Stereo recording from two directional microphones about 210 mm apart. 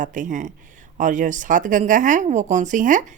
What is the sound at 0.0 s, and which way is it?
Speech, 35° right (ahead or behind).